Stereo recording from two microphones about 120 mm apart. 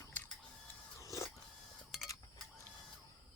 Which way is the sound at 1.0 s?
25° left (ahead or behind).